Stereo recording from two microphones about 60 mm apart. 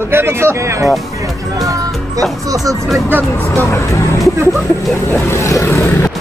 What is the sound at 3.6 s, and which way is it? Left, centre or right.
Speech, left.